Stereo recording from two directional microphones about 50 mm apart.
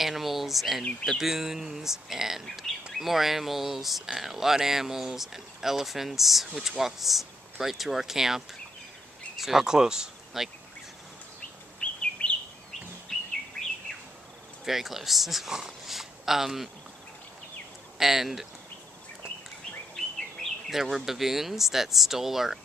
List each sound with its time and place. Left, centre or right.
0.0 s a sound: centre
1.2 s speech: centre
11.8 s chirp: left
13.1 s chirp: centre
14.6 s a man's voice: centre
17.9 s speech: centre
20.0 s bird: centre
20.7 s speech: centre